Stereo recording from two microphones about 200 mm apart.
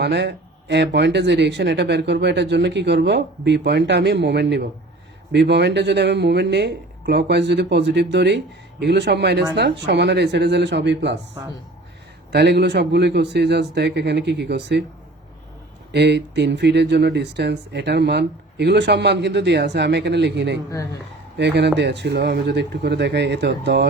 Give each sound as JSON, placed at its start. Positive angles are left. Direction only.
{"t": 0.0, "sound": "speech", "side_deg": -60}
{"t": 12.3, "sound": "speech", "side_deg": -55}
{"t": 15.9, "sound": "speech", "side_deg": -55}